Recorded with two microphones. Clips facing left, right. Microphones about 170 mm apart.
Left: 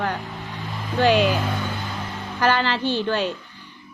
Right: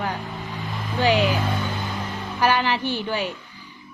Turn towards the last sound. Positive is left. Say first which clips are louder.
# left 3 dB
turn(degrees=-10)  # may be behind; listen again after turning